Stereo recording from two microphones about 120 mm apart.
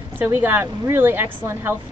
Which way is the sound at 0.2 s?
20° right (ahead or behind).